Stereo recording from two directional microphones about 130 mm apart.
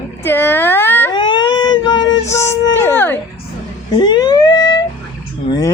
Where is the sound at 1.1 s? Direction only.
35° left (ahead or behind).